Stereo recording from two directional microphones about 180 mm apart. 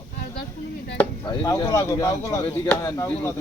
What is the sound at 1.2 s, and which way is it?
Speech, 25° left (ahead or behind).